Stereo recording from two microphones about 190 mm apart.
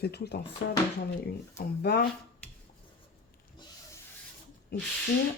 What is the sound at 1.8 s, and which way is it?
Speech, 55° left (ahead or behind).